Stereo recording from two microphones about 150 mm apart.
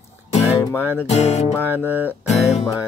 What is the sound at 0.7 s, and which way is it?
Music, 10° right (ahead or behind).